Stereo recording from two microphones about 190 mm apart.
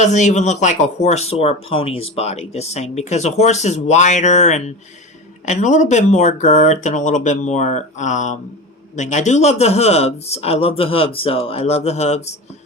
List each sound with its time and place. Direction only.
0.0 s speech: 40° left (ahead or behind)